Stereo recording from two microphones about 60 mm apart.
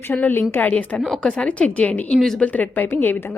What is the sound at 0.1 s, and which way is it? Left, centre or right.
Speech, left.